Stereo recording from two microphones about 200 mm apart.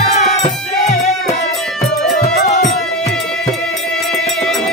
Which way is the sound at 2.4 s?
40° left (ahead or behind).